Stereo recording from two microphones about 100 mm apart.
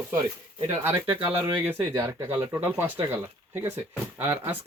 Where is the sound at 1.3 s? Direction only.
20° right (ahead or behind).